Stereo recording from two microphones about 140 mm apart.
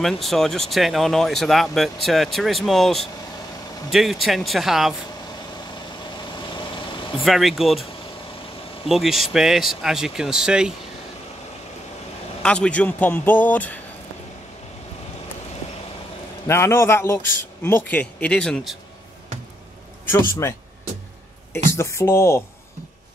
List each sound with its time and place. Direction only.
0.0 s speech: centre (ahead or behind)
6.5 s vehicle: 35° left (ahead or behind)
7.2 s speech: centre (ahead or behind)
8.8 s speech: centre (ahead or behind)
12.4 s speech: 5° left (ahead or behind)
16.4 s a man's voice: 20° left (ahead or behind); by 18.8 s centre (ahead or behind)
20.1 s a man's voice: 20° left (ahead or behind)
21.7 s a man's voice: 20° left (ahead or behind)